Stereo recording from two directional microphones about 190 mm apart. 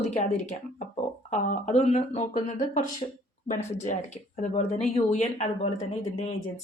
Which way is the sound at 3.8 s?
35° left (ahead or behind).